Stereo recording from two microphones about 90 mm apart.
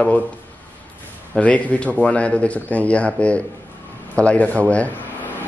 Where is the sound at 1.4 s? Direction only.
15° left (ahead or behind).